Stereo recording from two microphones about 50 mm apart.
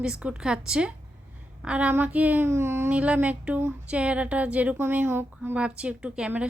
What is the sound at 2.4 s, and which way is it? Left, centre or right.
Speech, right.